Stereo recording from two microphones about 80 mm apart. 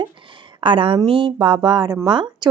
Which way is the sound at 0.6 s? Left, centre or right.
Right.